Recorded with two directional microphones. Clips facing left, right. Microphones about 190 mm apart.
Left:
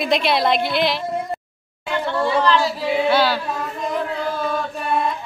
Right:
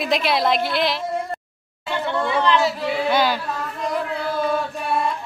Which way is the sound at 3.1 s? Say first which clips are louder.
Left 1 dB; 15° right (ahead or behind).